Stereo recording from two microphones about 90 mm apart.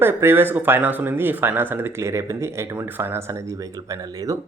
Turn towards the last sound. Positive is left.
turn(degrees=-40)  # may be behind; listen again after turning